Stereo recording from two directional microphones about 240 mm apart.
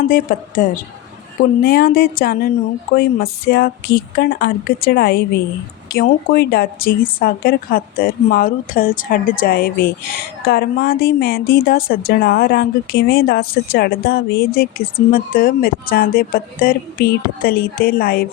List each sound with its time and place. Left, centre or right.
0.0 s speech: left